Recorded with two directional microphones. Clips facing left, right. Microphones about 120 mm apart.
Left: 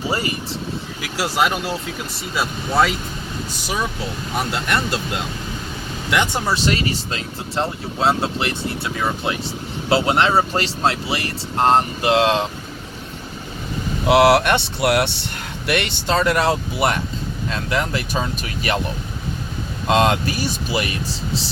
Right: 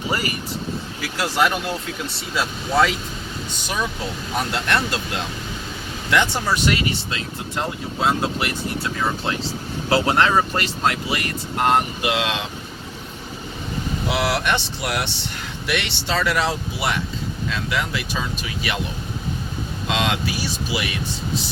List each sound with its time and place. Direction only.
0.1 s speech: 25° left (ahead or behind)
1.0 s speech: 10° left (ahead or behind)
4.5 s speech: 5° left (ahead or behind)
6.1 s speech: 15° left (ahead or behind)
6.7 s speech: 35° left (ahead or behind)
9.9 s speech: 20° left (ahead or behind); by 12.5 s 35° left (ahead or behind)
14.1 s speech: 65° left (ahead or behind)
15.6 s speech: 50° left (ahead or behind)
17.5 s speech: 40° left (ahead or behind)
19.9 s speech: 45° left (ahead or behind)